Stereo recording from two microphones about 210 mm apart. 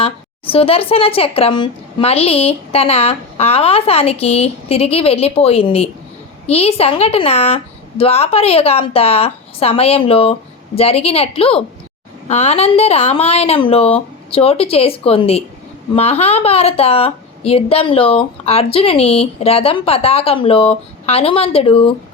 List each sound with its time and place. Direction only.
0.0 s a woman's voice: 25° left (ahead or behind)